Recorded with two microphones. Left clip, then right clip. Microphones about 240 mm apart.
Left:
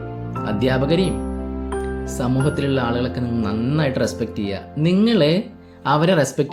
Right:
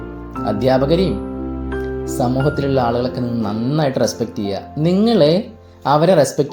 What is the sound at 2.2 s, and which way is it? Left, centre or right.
Speech, centre.